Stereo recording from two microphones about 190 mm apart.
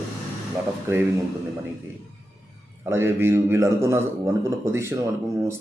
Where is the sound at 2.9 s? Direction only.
15° right (ahead or behind).